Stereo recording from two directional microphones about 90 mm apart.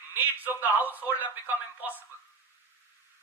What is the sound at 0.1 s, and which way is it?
A man's voice, 20° right (ahead or behind).